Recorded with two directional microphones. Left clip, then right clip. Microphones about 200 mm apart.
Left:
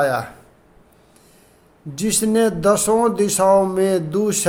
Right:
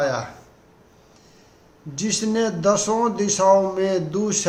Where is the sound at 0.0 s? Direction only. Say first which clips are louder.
Left 4 dB; 50° left (ahead or behind).